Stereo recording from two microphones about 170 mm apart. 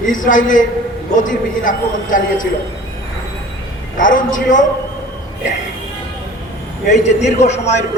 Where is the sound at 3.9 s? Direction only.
50° left (ahead or behind).